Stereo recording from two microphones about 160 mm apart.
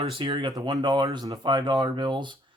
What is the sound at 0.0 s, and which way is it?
Speech, 35° right (ahead or behind).